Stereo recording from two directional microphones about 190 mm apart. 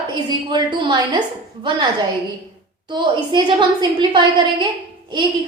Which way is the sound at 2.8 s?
25° right (ahead or behind).